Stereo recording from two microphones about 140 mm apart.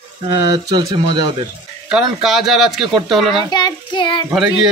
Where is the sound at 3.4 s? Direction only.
30° left (ahead or behind).